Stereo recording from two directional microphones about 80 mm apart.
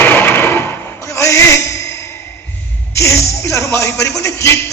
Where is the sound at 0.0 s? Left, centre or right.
Left.